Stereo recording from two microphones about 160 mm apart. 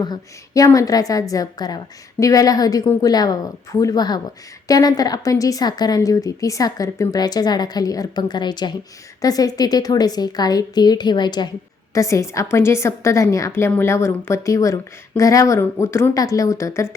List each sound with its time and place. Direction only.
0.0 s a woman's voice: 25° left (ahead or behind)